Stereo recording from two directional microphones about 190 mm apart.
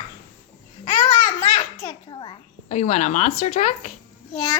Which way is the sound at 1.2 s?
40° left (ahead or behind).